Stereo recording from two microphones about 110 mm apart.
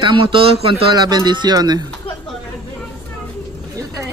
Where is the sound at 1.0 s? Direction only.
40° right (ahead or behind).